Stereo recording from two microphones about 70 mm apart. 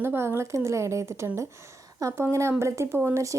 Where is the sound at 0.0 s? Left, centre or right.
Right.